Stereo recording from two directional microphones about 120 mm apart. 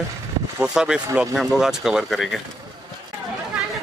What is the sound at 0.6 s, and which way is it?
Speech, 5° right (ahead or behind).